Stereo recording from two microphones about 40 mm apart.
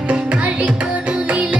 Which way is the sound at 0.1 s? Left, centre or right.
Right.